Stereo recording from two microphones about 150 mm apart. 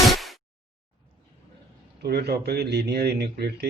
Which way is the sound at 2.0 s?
90° right.